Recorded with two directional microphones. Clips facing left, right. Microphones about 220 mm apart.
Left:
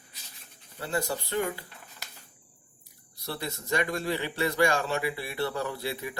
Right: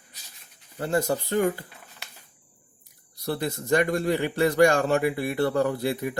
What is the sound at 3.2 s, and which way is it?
A man's voice, 50° right (ahead or behind).